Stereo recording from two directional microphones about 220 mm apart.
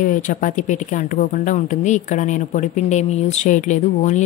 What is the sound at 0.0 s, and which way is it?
Speech, 35° left (ahead or behind).